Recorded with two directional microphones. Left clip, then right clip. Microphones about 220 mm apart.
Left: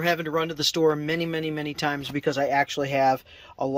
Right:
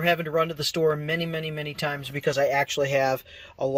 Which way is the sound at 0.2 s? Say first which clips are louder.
Right 1 dB; 5° left (ahead or behind).